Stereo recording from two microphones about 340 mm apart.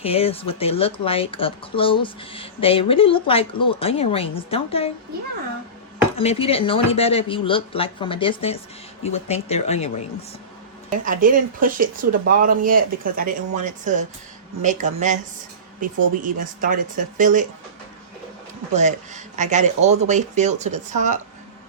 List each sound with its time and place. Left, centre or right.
0.0 s speech: centre
6.1 s speech: centre
10.8 s speech: right
18.7 s speech: right